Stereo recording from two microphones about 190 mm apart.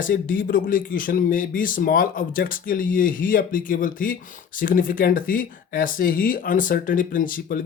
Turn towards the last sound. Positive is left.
turn(degrees=45)  # may be behind; listen again after turning